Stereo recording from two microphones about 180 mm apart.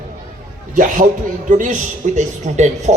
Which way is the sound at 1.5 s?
45° right (ahead or behind).